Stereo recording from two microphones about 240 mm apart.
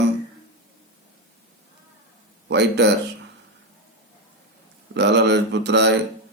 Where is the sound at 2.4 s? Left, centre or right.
Right.